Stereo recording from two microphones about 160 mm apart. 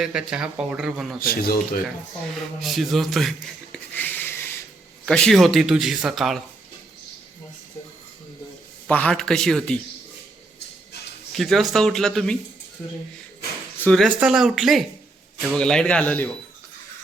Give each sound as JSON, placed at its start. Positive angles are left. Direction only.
{"t": 0.0, "sound": "speech", "side_deg": -5}
{"t": 1.2, "sound": "speech", "side_deg": 70}
{"t": 2.6, "sound": "speech", "side_deg": 0}
{"t": 8.9, "sound": "speech", "side_deg": 5}
{"t": 11.3, "sound": "speech", "side_deg": 0}
{"t": 13.7, "sound": "a sound", "side_deg": 10}
{"t": 14.0, "sound": "speech", "side_deg": -5}